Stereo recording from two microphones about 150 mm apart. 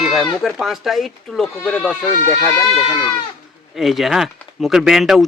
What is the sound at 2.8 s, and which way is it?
Speech, 30° left (ahead or behind).